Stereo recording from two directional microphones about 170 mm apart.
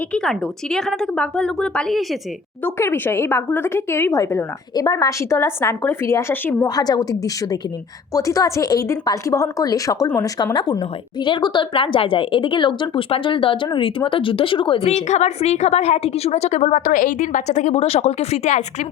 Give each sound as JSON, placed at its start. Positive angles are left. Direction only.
{"t": 0.1, "sound": "a woman's voice", "side_deg": 5}
{"t": 2.6, "sound": "a woman's voice", "side_deg": 15}
{"t": 6.7, "sound": "a woman's voice", "side_deg": 25}